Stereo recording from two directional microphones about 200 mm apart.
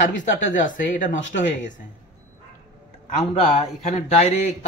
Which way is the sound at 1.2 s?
70° left (ahead or behind).